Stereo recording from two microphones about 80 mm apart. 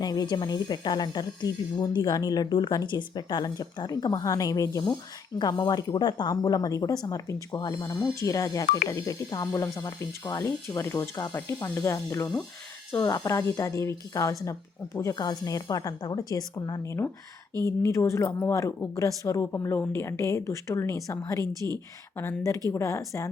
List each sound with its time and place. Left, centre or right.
0.0 s speech: left
4.1 s a woman's voice: left
5.4 s speech: left
6.3 s a woman's voice: left
11.6 s a woman's voice: left
15.1 s a woman's voice: left
16.8 s speech: left
22.7 s speech: left